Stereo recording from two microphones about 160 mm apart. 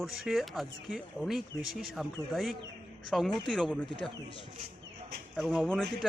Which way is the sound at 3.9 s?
30° left (ahead or behind).